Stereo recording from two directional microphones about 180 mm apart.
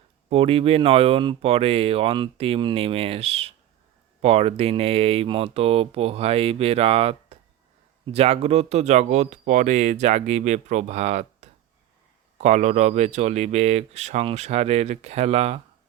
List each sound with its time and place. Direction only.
0.3 s speech: 30° right (ahead or behind)